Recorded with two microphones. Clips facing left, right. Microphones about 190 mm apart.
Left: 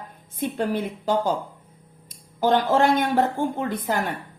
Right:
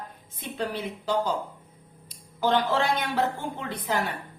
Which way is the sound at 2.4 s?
45° left (ahead or behind).